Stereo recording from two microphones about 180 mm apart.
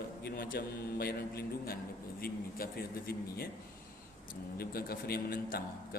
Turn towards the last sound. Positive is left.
turn(degrees=55)  # may be behind; listen again after turning